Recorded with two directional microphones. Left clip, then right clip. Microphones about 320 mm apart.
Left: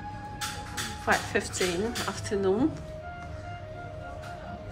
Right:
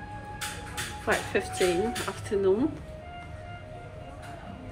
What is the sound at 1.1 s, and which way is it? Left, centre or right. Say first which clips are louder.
Speech: left 1 dB; centre.